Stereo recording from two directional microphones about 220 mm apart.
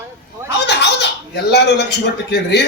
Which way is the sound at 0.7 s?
50° left (ahead or behind).